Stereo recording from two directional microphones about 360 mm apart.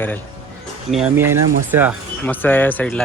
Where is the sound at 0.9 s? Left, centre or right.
Centre.